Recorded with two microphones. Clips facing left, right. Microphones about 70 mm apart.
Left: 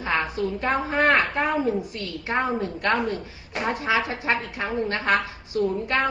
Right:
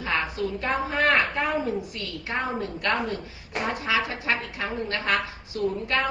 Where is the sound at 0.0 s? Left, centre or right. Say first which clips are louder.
Left 2 dB; left.